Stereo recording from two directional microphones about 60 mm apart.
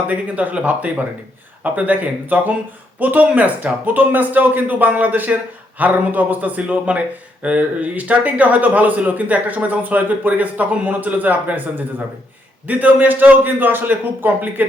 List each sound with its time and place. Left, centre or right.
0.1 s a man's voice: right